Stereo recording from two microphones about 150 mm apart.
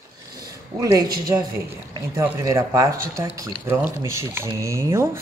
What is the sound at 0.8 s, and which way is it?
Speech, 20° right (ahead or behind).